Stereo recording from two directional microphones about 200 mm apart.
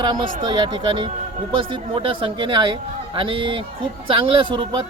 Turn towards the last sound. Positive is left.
turn(degrees=-25)  # may be behind; listen again after turning